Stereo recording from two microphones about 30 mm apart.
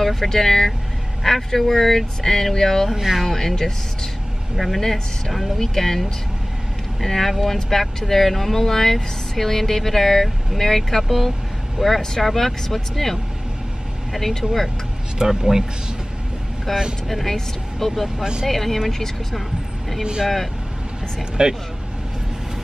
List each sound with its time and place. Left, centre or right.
0.0 s speech: centre
2.9 s speech: centre
3.3 s speech: centre
4.6 s speech: centre
5.6 s speech: centre
12.2 s speech: centre
14.2 s speech: centre
16.7 s speech: centre
18.2 s speech: right
18.5 s speech: centre
20.0 s speech: right
21.4 s speech: right